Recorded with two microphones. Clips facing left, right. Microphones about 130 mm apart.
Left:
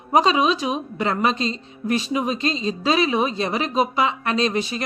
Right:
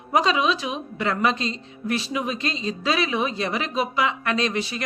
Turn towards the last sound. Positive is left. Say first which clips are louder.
# left 3 dB
turn(degrees=25)  # may be behind; listen again after turning